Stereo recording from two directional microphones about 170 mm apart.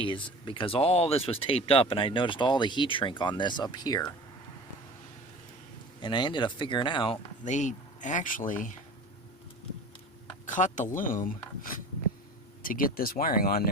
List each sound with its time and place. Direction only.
0.0 s speech: 30° left (ahead or behind)
6.0 s speech: 25° left (ahead or behind)
7.4 s speech: 45° left (ahead or behind)
10.4 s speech: 45° left (ahead or behind)
12.6 s speech: 55° left (ahead or behind)